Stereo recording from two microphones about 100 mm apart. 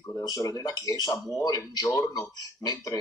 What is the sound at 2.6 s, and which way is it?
Speech, 40° left (ahead or behind).